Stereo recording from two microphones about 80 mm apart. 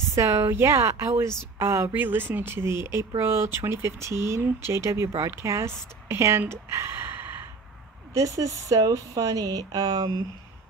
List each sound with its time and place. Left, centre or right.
0.1 s speech: right
8.1 s speech: right